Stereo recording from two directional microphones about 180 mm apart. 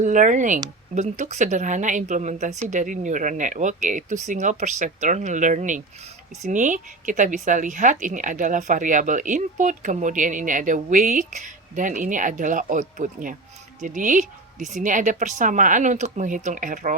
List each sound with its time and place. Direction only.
0.0 s a woman's voice: 45° right (ahead or behind)